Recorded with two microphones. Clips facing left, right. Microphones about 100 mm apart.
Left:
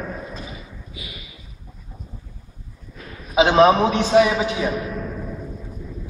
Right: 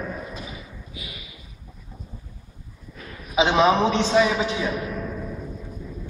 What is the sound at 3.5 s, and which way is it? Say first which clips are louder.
Speech: left 4 dB; 45° left (ahead or behind).